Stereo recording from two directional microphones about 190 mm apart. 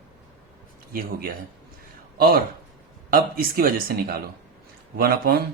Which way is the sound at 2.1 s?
50° right (ahead or behind).